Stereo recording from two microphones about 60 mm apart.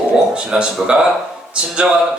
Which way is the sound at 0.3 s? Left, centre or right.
Centre.